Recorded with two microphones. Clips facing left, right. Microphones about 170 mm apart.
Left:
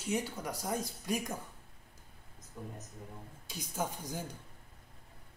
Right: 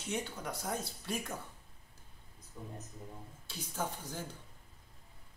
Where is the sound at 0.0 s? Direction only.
10° left (ahead or behind).